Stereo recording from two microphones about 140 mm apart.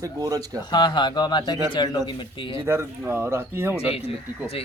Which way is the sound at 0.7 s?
30° left (ahead or behind).